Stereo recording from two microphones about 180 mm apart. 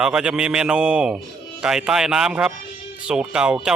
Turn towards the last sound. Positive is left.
turn(degrees=-5)  # may be behind; listen again after turning